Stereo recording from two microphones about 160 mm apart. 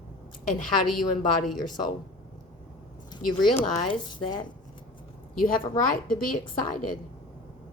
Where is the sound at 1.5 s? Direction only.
25° left (ahead or behind).